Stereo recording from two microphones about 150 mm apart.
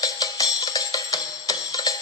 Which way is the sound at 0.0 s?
25° left (ahead or behind).